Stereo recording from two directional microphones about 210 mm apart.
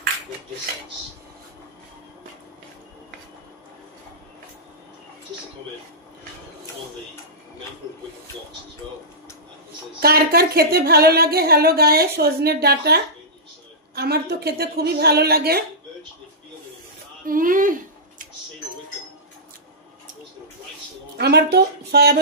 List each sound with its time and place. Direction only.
9.9 s speech: 45° right (ahead or behind)
17.3 s speech: 40° right (ahead or behind)
21.2 s a sound: 50° right (ahead or behind)